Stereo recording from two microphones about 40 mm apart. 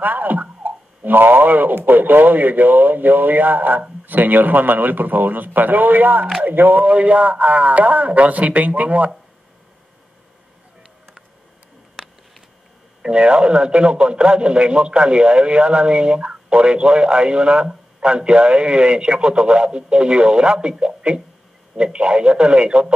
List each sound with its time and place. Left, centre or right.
0.0 s speech: right
6.9 s a man's voice: right
12.0 s a sound: centre
13.0 s a man's voice: right